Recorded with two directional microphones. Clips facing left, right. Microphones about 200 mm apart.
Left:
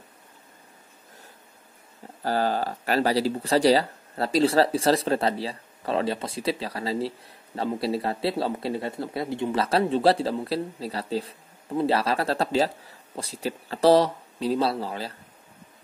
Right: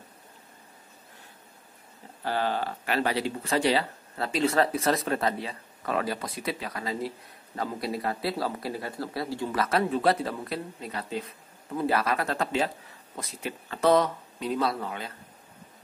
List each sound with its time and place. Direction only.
2.2 s speech: 40° left (ahead or behind)